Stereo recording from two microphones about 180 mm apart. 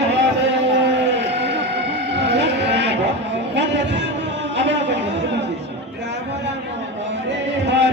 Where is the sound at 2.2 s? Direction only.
70° right (ahead or behind).